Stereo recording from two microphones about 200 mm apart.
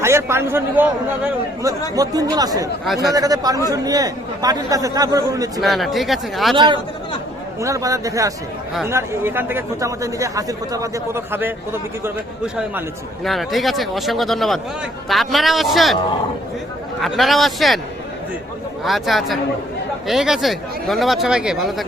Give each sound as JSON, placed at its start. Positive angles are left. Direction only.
{"t": 0.0, "sound": "speech", "side_deg": -15}
{"t": 2.8, "sound": "speech", "side_deg": 0}
{"t": 3.2, "sound": "speech", "side_deg": -20}
{"t": 5.5, "sound": "speech", "side_deg": 0}
{"t": 7.6, "sound": "speech", "side_deg": -15}
{"t": 13.2, "sound": "speech", "side_deg": 0}
{"t": 17.0, "sound": "speech", "side_deg": 0}
{"t": 18.9, "sound": "speech", "side_deg": 0}